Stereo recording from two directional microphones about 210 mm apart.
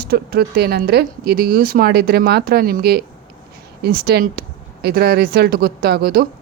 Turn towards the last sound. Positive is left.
turn(degrees=-45)  # may be behind; listen again after turning